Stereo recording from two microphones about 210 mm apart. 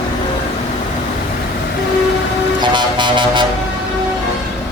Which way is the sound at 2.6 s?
20° right (ahead or behind).